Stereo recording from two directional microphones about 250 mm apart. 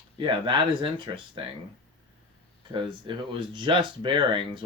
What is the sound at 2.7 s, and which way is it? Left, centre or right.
Speech, centre.